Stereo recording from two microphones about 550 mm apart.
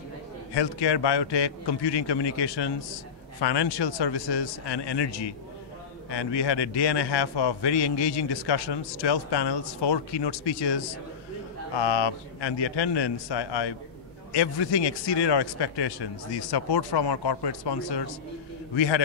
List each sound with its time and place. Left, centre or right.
0.6 s a man's voice: left